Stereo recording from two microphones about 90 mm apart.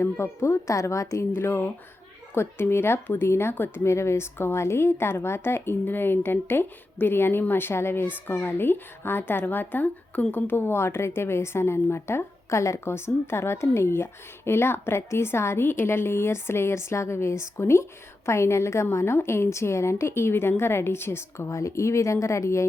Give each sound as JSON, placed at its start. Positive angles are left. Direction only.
{"t": 0.0, "sound": "a woman's voice", "side_deg": 30}
{"t": 1.3, "sound": "a woman's voice", "side_deg": 25}